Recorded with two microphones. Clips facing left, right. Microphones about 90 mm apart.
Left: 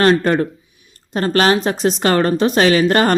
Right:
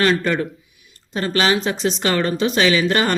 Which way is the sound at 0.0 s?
40° left (ahead or behind).